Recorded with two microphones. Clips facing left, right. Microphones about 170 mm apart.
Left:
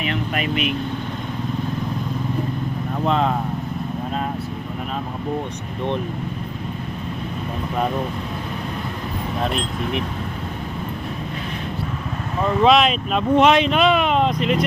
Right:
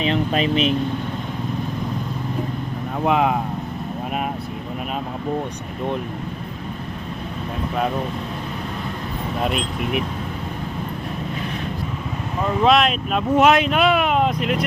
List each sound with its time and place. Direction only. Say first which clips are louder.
0.0 s speech: right 4 dB; 25° right (ahead or behind)
3.0 s speech: right 2 dB; 10° right (ahead or behind)
12.6 s speech: left 1 dB; centre (ahead or behind)